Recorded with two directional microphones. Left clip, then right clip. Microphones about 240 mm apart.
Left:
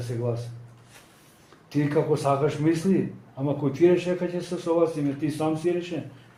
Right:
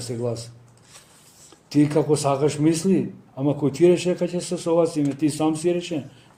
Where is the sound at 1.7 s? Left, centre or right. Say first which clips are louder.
Right 4 dB; right.